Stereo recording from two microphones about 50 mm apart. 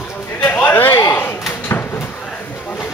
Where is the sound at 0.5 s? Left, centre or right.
Left.